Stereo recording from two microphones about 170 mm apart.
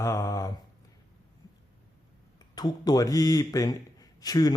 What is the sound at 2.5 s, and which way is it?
A man's voice, 25° left (ahead or behind).